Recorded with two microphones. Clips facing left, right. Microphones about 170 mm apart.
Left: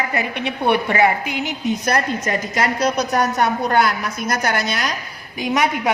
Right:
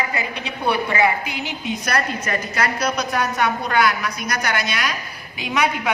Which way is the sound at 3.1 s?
45° left (ahead or behind).